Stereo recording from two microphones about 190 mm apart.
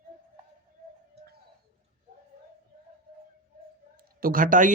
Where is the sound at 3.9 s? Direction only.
50° right (ahead or behind).